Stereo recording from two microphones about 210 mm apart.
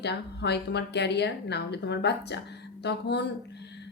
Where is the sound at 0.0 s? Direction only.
55° left (ahead or behind).